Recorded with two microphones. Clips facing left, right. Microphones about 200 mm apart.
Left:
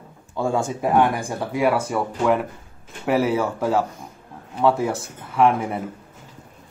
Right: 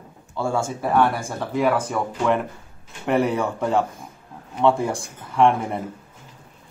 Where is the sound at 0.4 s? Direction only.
15° left (ahead or behind).